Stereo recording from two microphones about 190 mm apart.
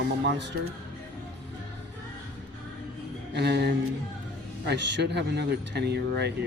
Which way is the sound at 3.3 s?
60° right (ahead or behind).